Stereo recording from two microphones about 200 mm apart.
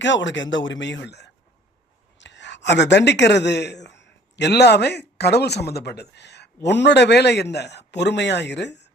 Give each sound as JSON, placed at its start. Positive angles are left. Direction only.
{"t": 0.0, "sound": "speech", "side_deg": 65}